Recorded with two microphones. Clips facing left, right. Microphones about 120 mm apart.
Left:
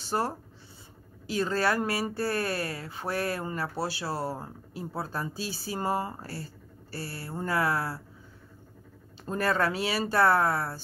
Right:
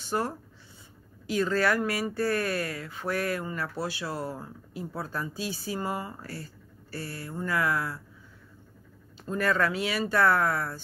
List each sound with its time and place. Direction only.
0.0 s speech: 30° left (ahead or behind)
9.2 s speech: 35° left (ahead or behind)